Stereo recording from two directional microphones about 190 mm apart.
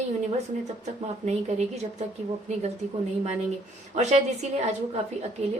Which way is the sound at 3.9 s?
35° right (ahead or behind).